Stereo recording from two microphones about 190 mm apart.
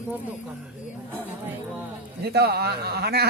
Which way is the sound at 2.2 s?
55° right (ahead or behind).